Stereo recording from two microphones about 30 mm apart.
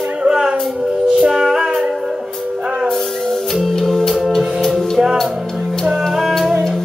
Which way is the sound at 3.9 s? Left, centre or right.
Centre.